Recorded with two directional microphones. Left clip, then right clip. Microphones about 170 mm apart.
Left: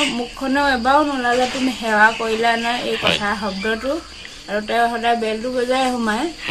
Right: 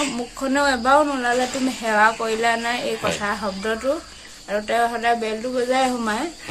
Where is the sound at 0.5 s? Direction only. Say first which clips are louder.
Left 1 dB; 25° right (ahead or behind).